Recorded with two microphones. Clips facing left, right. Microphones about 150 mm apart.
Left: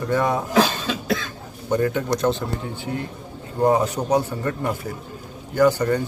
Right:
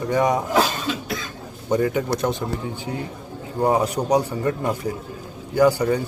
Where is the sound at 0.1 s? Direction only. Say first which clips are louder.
Right 2 dB; 15° right (ahead or behind).